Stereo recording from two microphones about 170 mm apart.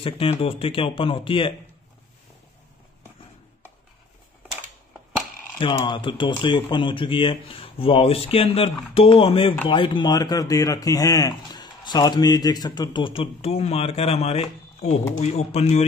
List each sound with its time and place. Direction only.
0.0 s speech: 35° left (ahead or behind)
5.6 s speech: 30° left (ahead or behind)